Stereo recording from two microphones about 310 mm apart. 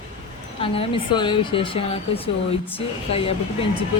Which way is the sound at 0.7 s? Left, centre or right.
Centre.